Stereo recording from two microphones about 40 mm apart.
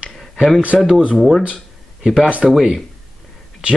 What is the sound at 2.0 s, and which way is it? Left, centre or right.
Speech, centre.